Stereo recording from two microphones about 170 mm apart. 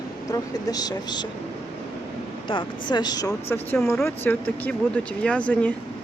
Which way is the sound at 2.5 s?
30° left (ahead or behind).